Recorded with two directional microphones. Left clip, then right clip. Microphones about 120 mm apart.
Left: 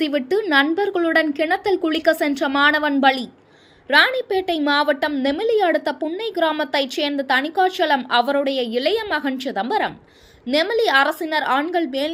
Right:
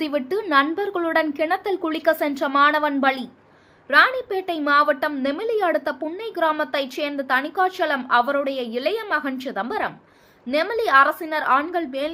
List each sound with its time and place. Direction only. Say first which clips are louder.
0.0 s a woman's voice: left 4 dB; 15° left (ahead or behind)